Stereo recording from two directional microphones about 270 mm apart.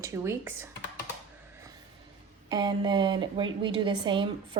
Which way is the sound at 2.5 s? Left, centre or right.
Centre.